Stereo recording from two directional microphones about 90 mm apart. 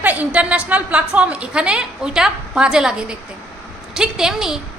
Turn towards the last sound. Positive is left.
turn(degrees=-5)  # may be behind; listen again after turning